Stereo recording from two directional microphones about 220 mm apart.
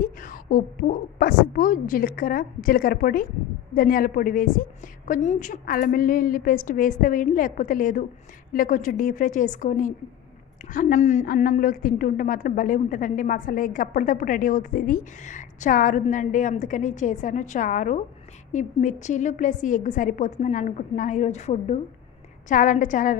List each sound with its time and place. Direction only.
0.0 s a woman's voice: 40° left (ahead or behind)